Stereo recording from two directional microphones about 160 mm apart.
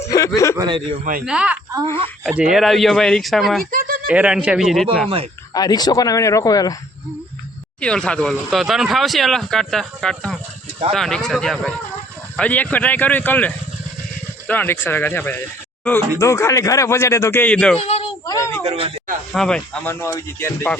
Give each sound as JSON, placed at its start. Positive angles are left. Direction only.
{"t": 0.1, "sound": "speech", "side_deg": 20}
{"t": 0.5, "sound": "a man's voice", "side_deg": -25}
{"t": 1.2, "sound": "speech", "side_deg": -5}
{"t": 3.7, "sound": "a sound", "side_deg": -65}
{"t": 4.1, "sound": "speech", "side_deg": -5}
{"t": 5.0, "sound": "speech", "side_deg": -35}
{"t": 5.5, "sound": "speech", "side_deg": 25}
{"t": 7.8, "sound": "speech", "side_deg": 5}
{"t": 17.7, "sound": "a child's voice", "side_deg": 40}
{"t": 18.3, "sound": "speech", "side_deg": 20}
{"t": 18.6, "sound": "speech", "side_deg": -40}
{"t": 19.3, "sound": "speech", "side_deg": 5}